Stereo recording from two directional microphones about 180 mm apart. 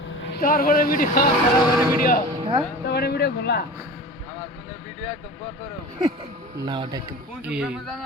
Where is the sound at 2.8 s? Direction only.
65° left (ahead or behind).